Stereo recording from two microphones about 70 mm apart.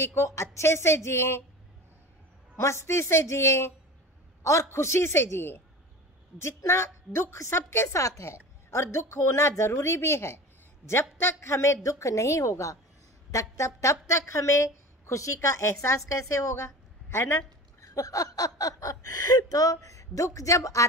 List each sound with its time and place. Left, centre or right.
0.0 s a man's voice: left
2.5 s a man's voice: left
17.7 s a woman's voice: left